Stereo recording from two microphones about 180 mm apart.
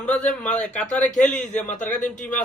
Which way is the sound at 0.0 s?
5° left (ahead or behind).